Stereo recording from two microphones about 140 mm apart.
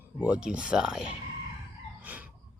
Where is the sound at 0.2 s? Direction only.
10° right (ahead or behind).